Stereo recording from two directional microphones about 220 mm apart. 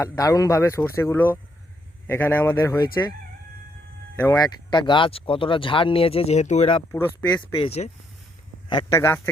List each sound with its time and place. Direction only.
0.0 s speech: 15° left (ahead or behind)
4.2 s speech: 15° left (ahead or behind)
6.9 s speech: 10° left (ahead or behind)
7.6 s speech: 30° left (ahead or behind)
8.7 s speech: 15° left (ahead or behind)